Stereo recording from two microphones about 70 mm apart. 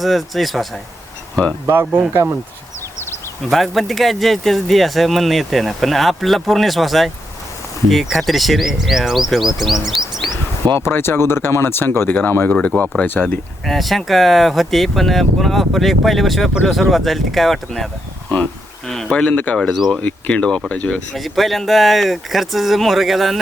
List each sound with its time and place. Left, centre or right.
0.0 s speech: centre
1.6 s speech: right
3.5 s speech: centre
10.8 s speech: left
12.5 s speech: centre
13.2 s speech: centre
19.1 s speech: centre
19.5 s speech: centre
20.0 s speech: left
20.9 s speech: centre